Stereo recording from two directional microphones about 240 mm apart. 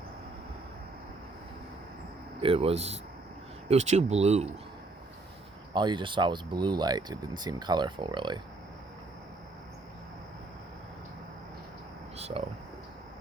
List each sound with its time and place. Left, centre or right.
2.4 s speech: right
5.7 s speech: centre
12.1 s a sound: right